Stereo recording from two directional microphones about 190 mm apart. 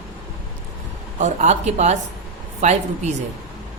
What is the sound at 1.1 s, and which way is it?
Speech, 40° right (ahead or behind).